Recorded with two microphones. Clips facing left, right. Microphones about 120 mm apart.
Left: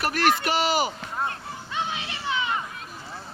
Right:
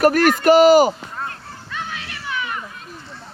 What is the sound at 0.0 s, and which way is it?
Speech, 45° right (ahead or behind).